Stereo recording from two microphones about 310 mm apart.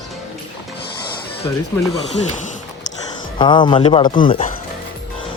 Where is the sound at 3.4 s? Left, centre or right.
Centre.